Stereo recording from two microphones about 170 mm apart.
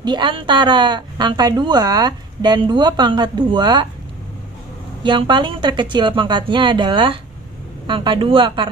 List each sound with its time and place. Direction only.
0.0 s a woman's voice: 25° right (ahead or behind)
5.0 s a woman's voice: 30° right (ahead or behind)